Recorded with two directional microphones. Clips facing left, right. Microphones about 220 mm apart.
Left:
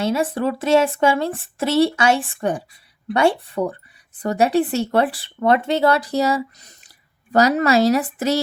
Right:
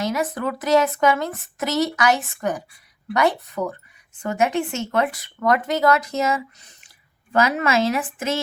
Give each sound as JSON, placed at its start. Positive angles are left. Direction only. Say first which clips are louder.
{"t": 0.0, "sound": "a woman's voice", "louder": "left 4 dB", "side_deg": 30}